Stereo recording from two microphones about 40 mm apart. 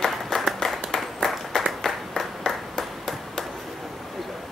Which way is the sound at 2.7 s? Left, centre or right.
Centre.